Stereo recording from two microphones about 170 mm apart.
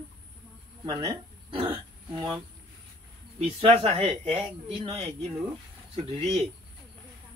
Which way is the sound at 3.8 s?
40° right (ahead or behind).